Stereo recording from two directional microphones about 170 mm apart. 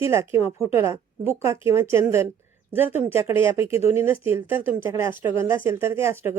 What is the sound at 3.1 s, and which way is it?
Speech, 35° left (ahead or behind).